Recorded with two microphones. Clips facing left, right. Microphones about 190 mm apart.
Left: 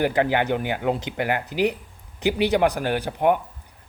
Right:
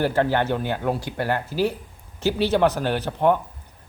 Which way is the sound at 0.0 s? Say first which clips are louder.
Even; 15° left (ahead or behind).